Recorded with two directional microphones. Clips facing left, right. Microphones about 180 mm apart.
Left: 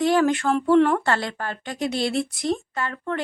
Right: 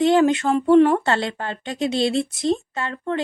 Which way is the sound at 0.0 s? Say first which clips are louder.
Right 3 dB; 20° right (ahead or behind).